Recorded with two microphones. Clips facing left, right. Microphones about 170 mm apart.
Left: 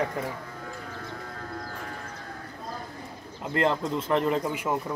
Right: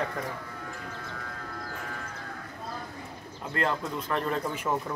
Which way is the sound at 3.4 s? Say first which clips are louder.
Left 4 dB; 20° left (ahead or behind).